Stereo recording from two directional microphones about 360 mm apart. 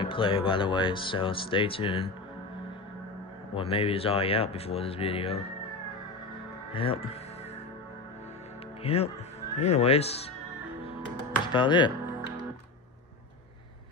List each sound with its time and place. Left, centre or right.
0.0 s speech: centre
3.5 s speech: centre
6.7 s speech: centre
8.8 s speech: centre
10.9 s music: centre